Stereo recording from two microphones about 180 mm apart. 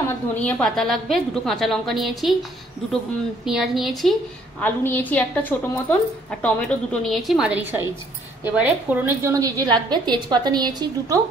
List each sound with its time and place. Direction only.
0.3 s a woman's voice: 10° left (ahead or behind)
3.4 s a woman's voice: centre (ahead or behind); by 11.1 s 20° right (ahead or behind)